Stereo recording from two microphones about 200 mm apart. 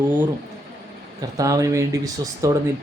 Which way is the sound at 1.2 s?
15° right (ahead or behind).